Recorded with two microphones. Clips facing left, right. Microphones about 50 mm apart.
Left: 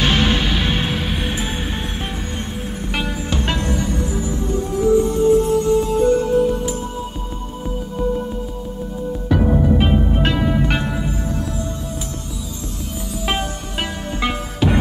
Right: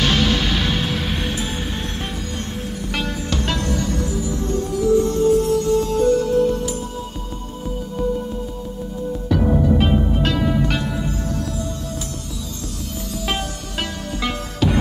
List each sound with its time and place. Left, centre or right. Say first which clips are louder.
0.0 s music: left 1 dB; left
1.0 s music: left 1 dB; centre
2.9 s music: left 1 dB; centre
9.3 s music: left 1 dB; centre
10.1 s music: left 1 dB; left
13.2 s music: left 3 dB; centre